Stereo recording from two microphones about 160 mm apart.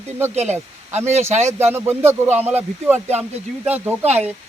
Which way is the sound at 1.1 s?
45° right (ahead or behind).